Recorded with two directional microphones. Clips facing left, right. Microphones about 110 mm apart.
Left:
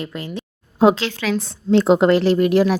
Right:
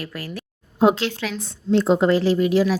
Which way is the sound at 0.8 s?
90° left.